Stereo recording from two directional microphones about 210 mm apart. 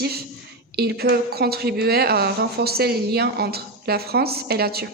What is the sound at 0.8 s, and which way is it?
Speech, 50° right (ahead or behind).